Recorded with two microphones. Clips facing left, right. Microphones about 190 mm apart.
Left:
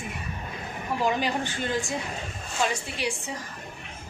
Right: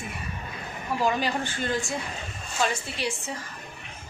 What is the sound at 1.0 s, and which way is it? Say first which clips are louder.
Speech: even; 15° left (ahead or behind).